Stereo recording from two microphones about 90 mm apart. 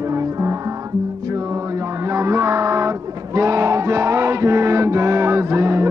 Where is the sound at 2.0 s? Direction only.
35° right (ahead or behind).